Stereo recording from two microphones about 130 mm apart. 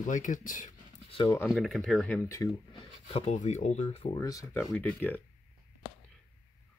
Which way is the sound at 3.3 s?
60° left (ahead or behind).